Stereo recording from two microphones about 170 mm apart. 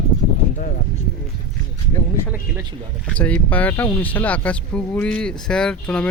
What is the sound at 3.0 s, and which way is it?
Speech, 10° left (ahead or behind).